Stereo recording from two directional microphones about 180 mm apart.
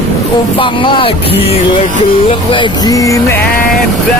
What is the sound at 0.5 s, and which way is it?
Music, 30° left (ahead or behind).